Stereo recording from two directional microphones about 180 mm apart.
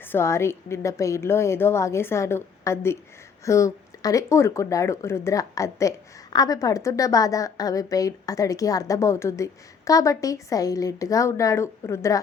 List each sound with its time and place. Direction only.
0.0 s a woman's voice: 15° left (ahead or behind)